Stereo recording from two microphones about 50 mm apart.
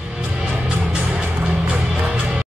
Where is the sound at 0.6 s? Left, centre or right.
Right.